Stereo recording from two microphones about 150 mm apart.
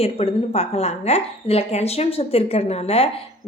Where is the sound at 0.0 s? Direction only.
40° left (ahead or behind).